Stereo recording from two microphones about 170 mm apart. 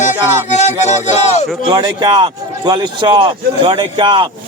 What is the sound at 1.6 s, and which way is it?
Speech, 25° right (ahead or behind).